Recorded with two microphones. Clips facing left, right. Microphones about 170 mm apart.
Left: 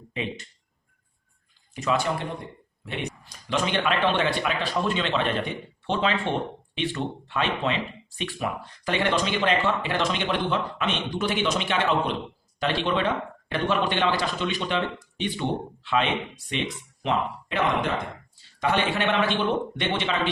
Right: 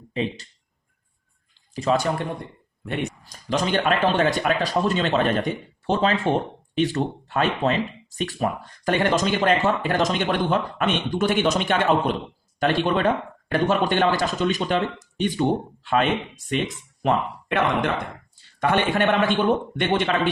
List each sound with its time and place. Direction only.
0.1 s speech: 35° right (ahead or behind)
1.7 s speech: 35° right (ahead or behind)
3.5 s speech: 40° right (ahead or behind)